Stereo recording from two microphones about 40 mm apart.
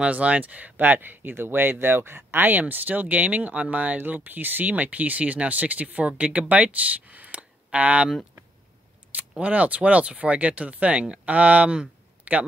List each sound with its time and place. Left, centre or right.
0.0 s speech: right
4.1 s speech: right
9.4 s speech: right
12.3 s a sound: right